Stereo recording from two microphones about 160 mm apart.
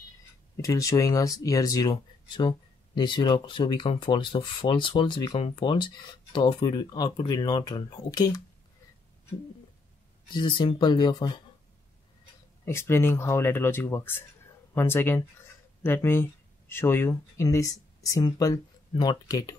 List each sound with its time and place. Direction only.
0.6 s speech: 20° left (ahead or behind)
10.3 s speech: 30° left (ahead or behind)
12.6 s speech: 15° left (ahead or behind)